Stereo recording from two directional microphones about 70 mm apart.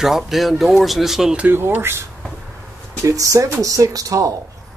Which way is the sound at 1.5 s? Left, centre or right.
Right.